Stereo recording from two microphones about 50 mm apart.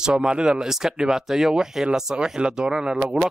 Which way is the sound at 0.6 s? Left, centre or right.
Centre.